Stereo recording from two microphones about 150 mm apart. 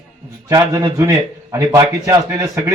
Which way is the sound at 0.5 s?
25° right (ahead or behind).